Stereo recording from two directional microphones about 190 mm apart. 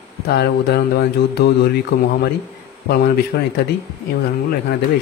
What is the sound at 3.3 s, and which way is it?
Speech, 60° left (ahead or behind).